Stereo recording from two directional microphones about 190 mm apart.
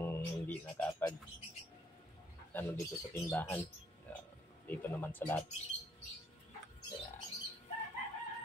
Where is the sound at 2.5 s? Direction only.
10° left (ahead or behind).